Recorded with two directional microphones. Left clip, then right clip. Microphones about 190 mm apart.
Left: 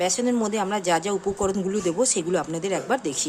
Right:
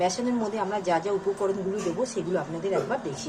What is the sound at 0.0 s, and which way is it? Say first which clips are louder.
Speech: left 3 dB; 40° left (ahead or behind).